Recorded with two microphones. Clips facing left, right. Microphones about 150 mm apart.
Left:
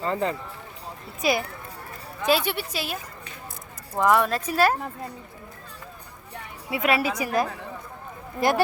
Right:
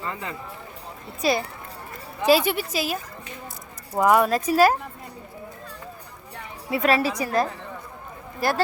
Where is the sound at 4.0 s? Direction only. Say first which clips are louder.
Right 2 dB; 10° right (ahead or behind).